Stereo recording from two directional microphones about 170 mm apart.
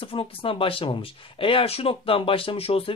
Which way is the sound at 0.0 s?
30° left (ahead or behind).